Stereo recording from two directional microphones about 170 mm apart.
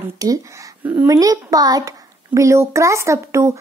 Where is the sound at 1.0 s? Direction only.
20° right (ahead or behind).